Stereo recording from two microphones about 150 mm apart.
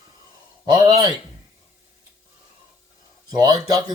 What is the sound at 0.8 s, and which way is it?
Speech, 30° right (ahead or behind).